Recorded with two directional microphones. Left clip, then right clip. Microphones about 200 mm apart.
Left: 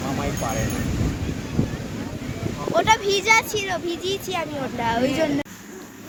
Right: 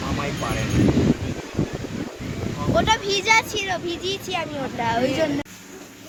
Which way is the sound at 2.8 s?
50° left (ahead or behind).